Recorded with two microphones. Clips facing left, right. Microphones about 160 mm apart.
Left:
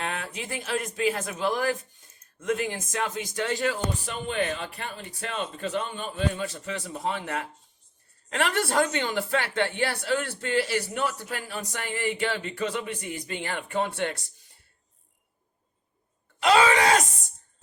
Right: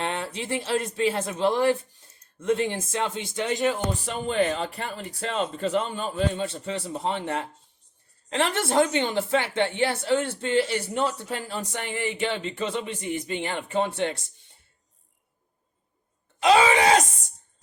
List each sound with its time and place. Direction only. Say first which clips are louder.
0.0 s a woman's voice: right 3 dB; 30° right (ahead or behind)
4.3 s a man's voice: right 5 dB; 35° right (ahead or behind)
16.4 s a woman's voice: right 2 dB; 20° right (ahead or behind)